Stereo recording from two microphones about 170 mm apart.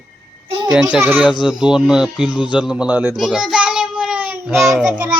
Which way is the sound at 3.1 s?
Centre (ahead or behind).